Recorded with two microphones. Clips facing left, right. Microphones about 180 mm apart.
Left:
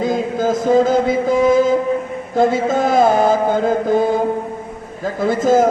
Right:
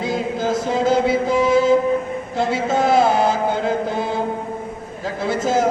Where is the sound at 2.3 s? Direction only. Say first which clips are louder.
Left 5 dB; 50° left (ahead or behind).